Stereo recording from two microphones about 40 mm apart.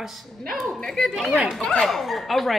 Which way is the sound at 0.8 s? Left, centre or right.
Centre.